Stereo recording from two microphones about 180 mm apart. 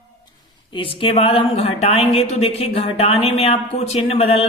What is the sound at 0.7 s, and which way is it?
A woman's voice, 30° left (ahead or behind).